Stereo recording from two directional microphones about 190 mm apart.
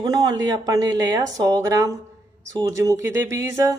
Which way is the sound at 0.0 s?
20° right (ahead or behind).